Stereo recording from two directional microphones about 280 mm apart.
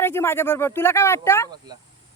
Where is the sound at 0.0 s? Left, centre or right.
Centre.